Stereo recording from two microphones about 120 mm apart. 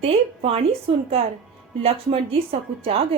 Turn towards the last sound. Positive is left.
turn(degrees=-55)  # may be behind; listen again after turning